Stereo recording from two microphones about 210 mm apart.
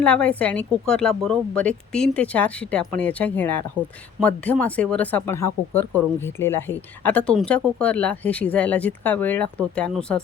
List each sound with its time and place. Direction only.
0.0 s speech: 5° left (ahead or behind)